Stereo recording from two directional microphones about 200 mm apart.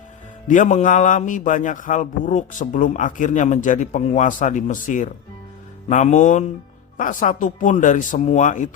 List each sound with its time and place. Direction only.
0.4 s a man's voice: 40° left (ahead or behind)